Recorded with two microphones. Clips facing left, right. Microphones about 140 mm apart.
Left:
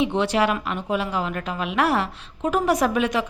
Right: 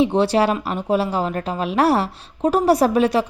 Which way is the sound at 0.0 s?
35° right (ahead or behind).